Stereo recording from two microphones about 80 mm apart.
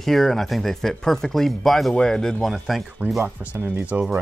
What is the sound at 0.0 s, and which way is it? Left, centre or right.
Speech, centre.